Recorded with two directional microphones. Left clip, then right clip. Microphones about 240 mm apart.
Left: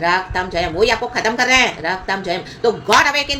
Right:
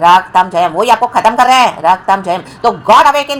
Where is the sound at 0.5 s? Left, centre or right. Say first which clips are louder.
Right 7 dB; right.